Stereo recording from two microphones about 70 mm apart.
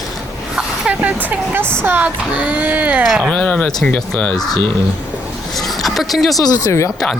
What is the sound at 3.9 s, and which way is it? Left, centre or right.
Speech, left.